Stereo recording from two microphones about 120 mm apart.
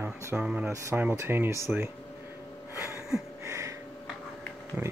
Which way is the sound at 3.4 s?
25° right (ahead or behind).